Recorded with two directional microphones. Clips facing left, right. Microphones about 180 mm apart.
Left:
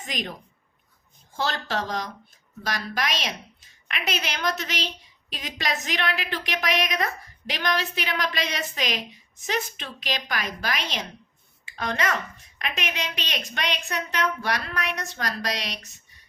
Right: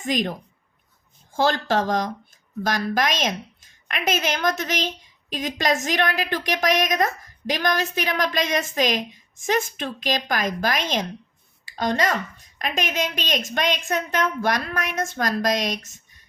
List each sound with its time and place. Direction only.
0.0 s a woman's voice: 45° right (ahead or behind)
1.4 s a woman's voice: 50° right (ahead or behind)